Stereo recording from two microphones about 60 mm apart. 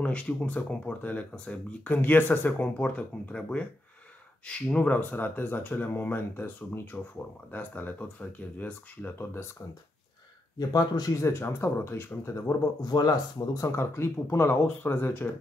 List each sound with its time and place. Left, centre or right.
0.0 s speech: left
2.8 s speech: centre; by 9.5 s left
10.7 s speech: left
11.2 s speech: left
12.3 s speech: left
13.7 s speech: left
14.8 s speech: left